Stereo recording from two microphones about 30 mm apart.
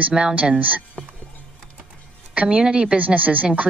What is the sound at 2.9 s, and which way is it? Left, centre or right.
Speech, right.